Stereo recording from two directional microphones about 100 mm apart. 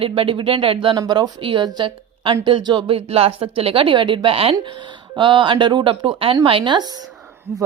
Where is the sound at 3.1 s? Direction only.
85° right; by 6.8 s 55° right (ahead or behind).